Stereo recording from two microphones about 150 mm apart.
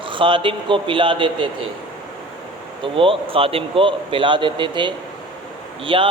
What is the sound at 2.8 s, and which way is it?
A man's voice, 35° right (ahead or behind).